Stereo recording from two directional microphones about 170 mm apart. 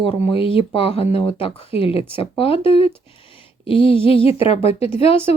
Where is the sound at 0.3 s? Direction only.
30° left (ahead or behind).